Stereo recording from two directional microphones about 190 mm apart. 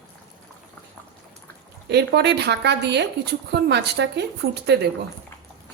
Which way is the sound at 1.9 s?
60° right (ahead or behind).